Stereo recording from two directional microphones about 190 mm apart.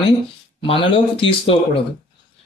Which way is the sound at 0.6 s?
25° left (ahead or behind).